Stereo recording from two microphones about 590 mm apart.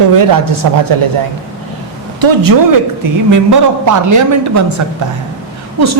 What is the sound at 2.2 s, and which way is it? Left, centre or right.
A woman's voice, right.